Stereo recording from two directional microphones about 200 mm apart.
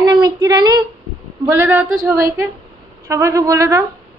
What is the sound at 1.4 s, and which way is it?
Speech, 15° right (ahead or behind).